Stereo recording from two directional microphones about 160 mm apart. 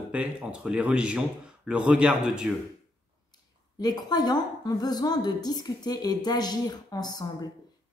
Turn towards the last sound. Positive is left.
turn(degrees=25)  # may be behind; listen again after turning